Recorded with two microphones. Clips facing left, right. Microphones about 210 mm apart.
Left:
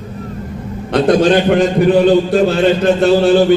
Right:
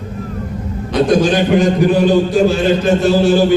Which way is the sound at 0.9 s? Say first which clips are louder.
Left 2 dB; 60° left (ahead or behind).